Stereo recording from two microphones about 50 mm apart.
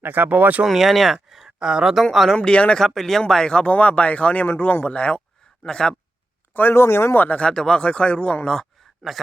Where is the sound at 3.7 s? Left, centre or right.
Left.